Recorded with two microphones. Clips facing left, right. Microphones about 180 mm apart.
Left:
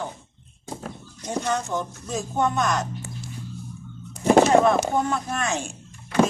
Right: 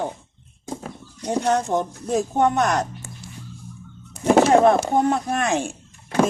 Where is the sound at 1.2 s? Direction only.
60° right (ahead or behind).